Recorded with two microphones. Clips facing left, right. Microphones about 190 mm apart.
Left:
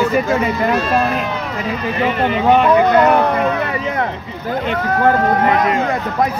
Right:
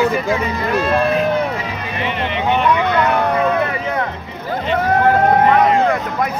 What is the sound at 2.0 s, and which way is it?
Speech, 40° left (ahead or behind).